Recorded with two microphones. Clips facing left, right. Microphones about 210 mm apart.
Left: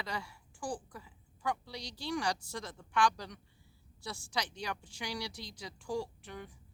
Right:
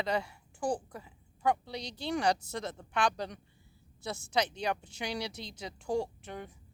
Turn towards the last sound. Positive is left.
turn(degrees=-25)  # may be behind; listen again after turning